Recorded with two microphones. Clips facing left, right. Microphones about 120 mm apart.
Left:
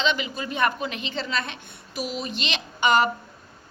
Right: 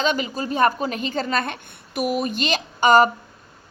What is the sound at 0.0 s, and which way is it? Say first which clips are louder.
A woman's voice: right 3 dB; 45° right (ahead or behind).